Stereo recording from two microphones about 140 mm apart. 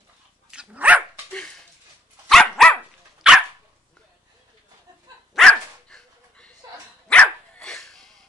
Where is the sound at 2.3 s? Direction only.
Centre (ahead or behind).